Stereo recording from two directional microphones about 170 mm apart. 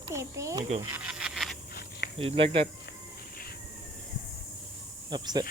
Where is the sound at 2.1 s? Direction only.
35° right (ahead or behind).